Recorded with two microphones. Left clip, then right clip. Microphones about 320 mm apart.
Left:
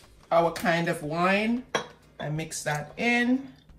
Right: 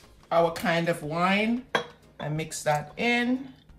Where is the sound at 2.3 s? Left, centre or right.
Centre.